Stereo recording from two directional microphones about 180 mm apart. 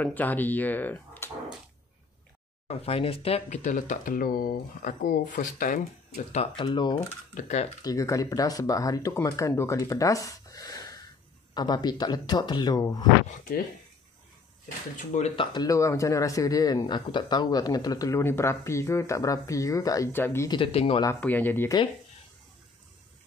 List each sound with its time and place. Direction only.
0.0 s speech: 10° left (ahead or behind)
2.7 s speech: 30° left (ahead or behind)
6.5 s speech: 25° left (ahead or behind)
7.3 s speech: 40° left (ahead or behind)
7.8 s speech: 20° left (ahead or behind)
15.1 s speech: 35° left (ahead or behind)
15.5 s speech: 20° left (ahead or behind)
20.4 s speech: 30° left (ahead or behind)
21.2 s speech: 10° left (ahead or behind)